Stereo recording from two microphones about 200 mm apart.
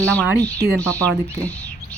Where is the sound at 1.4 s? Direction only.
5° left (ahead or behind).